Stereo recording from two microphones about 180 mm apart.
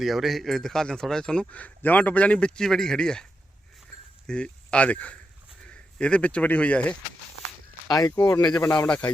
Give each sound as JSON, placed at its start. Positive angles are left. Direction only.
{"t": 0.0, "sound": "a man's voice", "side_deg": 0}
{"t": 4.3, "sound": "speech", "side_deg": 5}
{"t": 7.9, "sound": "speech", "side_deg": 20}